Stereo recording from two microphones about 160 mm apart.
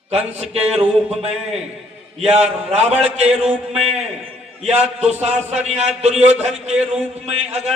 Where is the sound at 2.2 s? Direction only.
40° right (ahead or behind).